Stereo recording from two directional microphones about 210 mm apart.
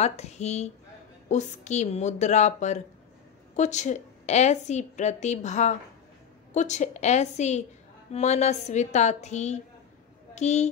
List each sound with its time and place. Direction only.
0.0 s a woman's voice: 30° left (ahead or behind)